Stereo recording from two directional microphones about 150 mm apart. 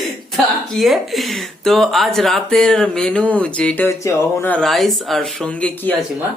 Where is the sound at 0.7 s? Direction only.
Centre (ahead or behind).